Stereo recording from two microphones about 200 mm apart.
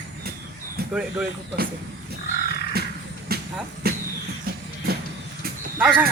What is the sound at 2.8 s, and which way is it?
Crow, 50° right (ahead or behind).